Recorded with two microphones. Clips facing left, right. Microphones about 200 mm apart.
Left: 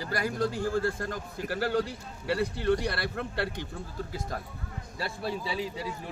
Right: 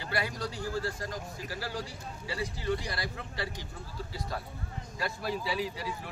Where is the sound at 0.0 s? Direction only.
45° left (ahead or behind).